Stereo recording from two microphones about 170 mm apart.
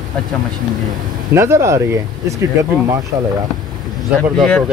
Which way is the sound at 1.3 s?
15° right (ahead or behind).